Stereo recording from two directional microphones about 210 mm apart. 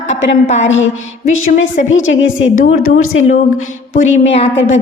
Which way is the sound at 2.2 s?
65° left (ahead or behind).